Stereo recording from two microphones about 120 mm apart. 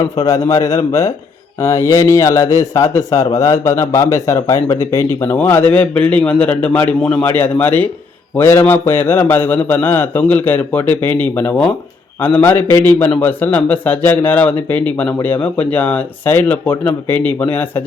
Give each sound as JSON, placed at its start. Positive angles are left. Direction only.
{"t": 0.0, "sound": "speech", "side_deg": 30}